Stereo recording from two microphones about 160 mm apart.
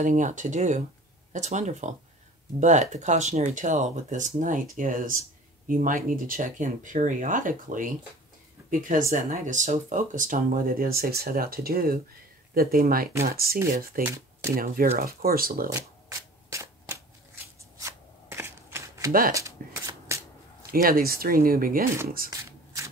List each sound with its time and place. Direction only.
0.0 s speech: 50° right (ahead or behind); by 13.6 s 70° right (ahead or behind)
14.0 s speech: 15° right (ahead or behind)
14.5 s speech: 65° right (ahead or behind)
15.7 s shuffling cards: 20° right (ahead or behind)
20.7 s speech: 65° right (ahead or behind)
22.3 s shuffling cards: 20° right (ahead or behind)